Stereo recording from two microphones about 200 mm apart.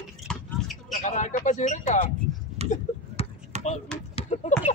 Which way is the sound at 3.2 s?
30° left (ahead or behind).